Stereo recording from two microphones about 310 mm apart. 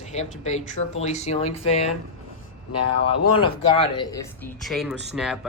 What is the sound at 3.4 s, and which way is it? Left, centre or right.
Speech, centre.